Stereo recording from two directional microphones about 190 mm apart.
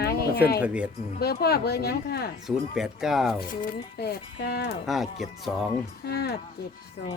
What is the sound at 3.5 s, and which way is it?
Speech, 45° left (ahead or behind).